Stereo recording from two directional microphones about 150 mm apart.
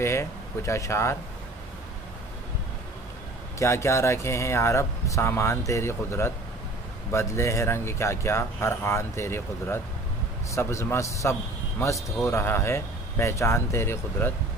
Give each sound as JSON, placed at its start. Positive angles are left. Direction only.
{"t": 0.0, "sound": "speech", "side_deg": 20}
{"t": 3.5, "sound": "speech", "side_deg": 20}